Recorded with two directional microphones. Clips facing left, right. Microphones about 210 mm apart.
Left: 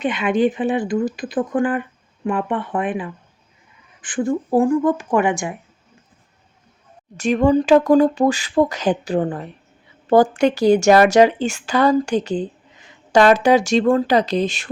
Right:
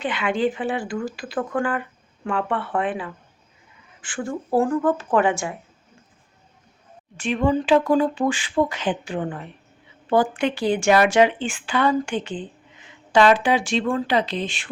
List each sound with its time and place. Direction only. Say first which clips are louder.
0.0 s speech: left 5 dB; 20° left (ahead or behind)
7.2 s speech: left 6 dB; 40° left (ahead or behind)